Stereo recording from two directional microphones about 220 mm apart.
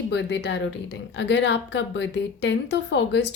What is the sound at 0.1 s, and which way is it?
Speech, 55° left (ahead or behind).